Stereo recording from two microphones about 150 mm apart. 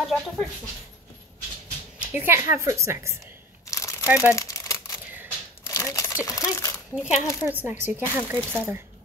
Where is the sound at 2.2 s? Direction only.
15° right (ahead or behind).